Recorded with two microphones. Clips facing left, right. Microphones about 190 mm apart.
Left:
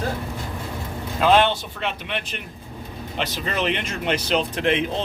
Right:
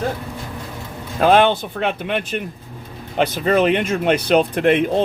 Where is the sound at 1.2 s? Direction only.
50° right (ahead or behind).